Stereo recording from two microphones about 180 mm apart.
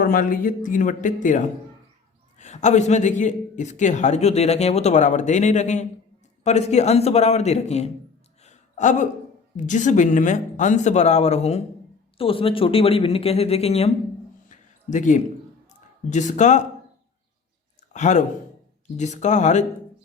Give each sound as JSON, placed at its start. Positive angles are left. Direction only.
{"t": 0.0, "sound": "a man's voice", "side_deg": 50}
{"t": 8.4, "sound": "a sound", "side_deg": 45}
{"t": 9.6, "sound": "a man's voice", "side_deg": 45}
{"t": 14.5, "sound": "a sound", "side_deg": 45}
{"t": 16.0, "sound": "a man's voice", "side_deg": 40}
{"t": 17.9, "sound": "a man's voice", "side_deg": 40}